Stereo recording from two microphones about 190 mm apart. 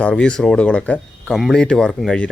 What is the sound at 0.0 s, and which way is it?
A man's voice, 5° left (ahead or behind).